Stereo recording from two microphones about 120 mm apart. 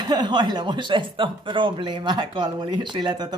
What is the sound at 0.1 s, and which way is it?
Speech, 40° right (ahead or behind).